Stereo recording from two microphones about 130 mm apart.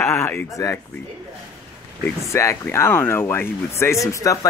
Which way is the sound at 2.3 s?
20° left (ahead or behind).